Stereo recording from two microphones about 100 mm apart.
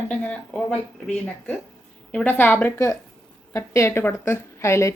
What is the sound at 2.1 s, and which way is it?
A woman's voice, 20° left (ahead or behind).